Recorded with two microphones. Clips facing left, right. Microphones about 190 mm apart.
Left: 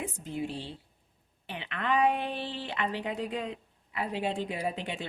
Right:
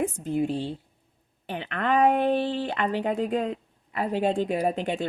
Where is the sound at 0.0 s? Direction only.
50° right (ahead or behind).